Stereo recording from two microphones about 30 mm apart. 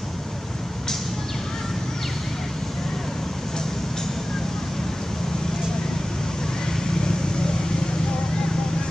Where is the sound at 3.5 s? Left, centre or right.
Centre.